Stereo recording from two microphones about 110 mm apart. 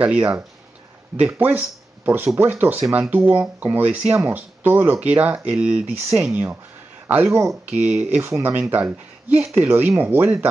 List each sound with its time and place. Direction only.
0.0 s speech: 10° right (ahead or behind)